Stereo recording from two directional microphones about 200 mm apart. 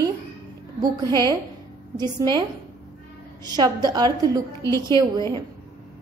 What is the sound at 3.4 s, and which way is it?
A woman's voice, 20° right (ahead or behind).